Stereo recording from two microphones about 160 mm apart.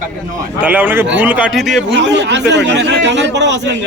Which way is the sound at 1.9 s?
90° right.